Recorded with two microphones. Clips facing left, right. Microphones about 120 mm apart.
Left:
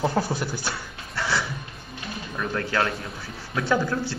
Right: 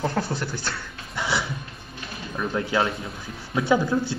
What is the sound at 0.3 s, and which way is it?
Speech, 10° left (ahead or behind).